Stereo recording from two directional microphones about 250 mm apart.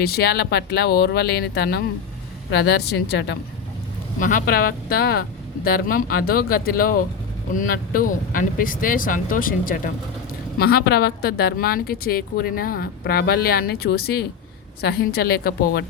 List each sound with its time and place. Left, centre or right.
0.0 s a woman's voice: left
4.2 s a woman's voice: left